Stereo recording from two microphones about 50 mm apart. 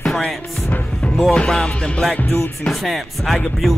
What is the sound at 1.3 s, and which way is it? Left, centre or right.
Music, centre.